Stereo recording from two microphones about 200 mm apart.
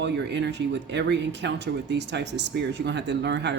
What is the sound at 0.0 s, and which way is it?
Speech, 60° right (ahead or behind).